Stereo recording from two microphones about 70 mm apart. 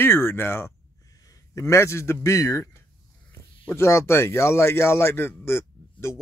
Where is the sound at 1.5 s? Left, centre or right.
Left.